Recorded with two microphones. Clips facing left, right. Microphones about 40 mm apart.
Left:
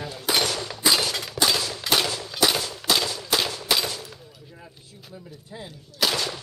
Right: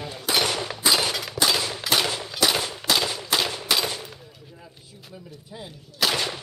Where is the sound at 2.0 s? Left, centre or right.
Centre.